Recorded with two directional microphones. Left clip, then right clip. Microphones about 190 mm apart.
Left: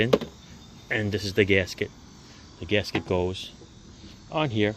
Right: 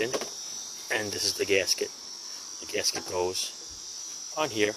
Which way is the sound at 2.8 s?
15° right (ahead or behind).